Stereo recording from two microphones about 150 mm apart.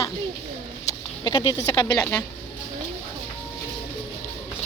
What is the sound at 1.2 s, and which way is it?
Speech, 25° left (ahead or behind).